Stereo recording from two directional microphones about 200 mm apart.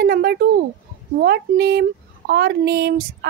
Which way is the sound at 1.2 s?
55° right (ahead or behind).